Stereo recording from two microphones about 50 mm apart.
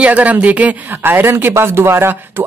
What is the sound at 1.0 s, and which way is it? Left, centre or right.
Speech, right.